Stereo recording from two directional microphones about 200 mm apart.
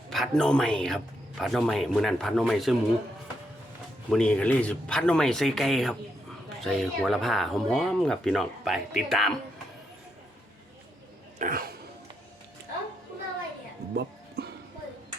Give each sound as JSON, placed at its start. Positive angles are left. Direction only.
{"t": 0.1, "sound": "a man's voice", "side_deg": 5}
{"t": 4.1, "sound": "a man's voice", "side_deg": 5}
{"t": 11.3, "sound": "throat clearing", "side_deg": -45}
{"t": 13.9, "sound": "music", "side_deg": -55}